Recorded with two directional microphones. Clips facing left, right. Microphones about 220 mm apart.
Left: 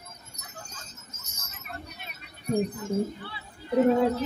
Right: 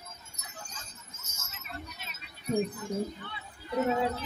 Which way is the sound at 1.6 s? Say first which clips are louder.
Left 2 dB; 60° left (ahead or behind).